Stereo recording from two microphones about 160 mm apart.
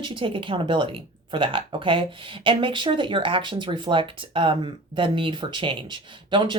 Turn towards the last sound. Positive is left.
turn(degrees=-30)  # may be behind; listen again after turning